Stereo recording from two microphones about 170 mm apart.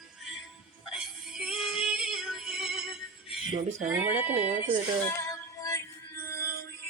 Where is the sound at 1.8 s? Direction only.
5° right (ahead or behind).